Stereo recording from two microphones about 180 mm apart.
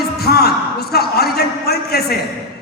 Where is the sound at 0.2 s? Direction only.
60° left (ahead or behind).